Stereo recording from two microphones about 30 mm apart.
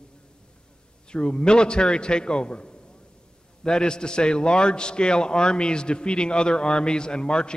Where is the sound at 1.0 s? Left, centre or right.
Left.